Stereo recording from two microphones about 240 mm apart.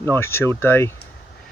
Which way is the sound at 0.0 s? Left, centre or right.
Centre.